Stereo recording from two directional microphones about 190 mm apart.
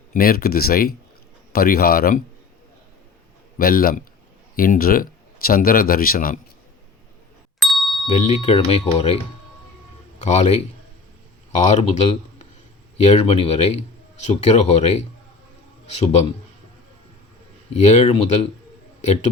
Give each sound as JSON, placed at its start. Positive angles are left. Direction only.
{"t": 0.1, "sound": "speech", "side_deg": 50}
{"t": 3.6, "sound": "speech", "side_deg": 50}
{"t": 7.6, "sound": "ding", "side_deg": 0}
{"t": 8.2, "sound": "a man's voice", "side_deg": 35}
{"t": 17.7, "sound": "speech", "side_deg": 35}